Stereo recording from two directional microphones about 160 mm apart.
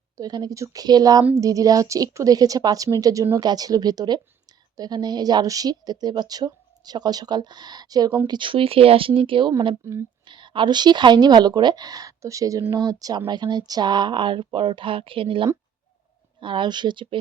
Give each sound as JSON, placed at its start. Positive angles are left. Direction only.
{"t": 0.2, "sound": "a woman's voice", "side_deg": -25}
{"t": 9.8, "sound": "speech", "side_deg": -15}
{"t": 10.2, "sound": "a woman's voice", "side_deg": -30}